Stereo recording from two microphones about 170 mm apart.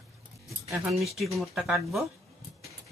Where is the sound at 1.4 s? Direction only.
Centre (ahead or behind).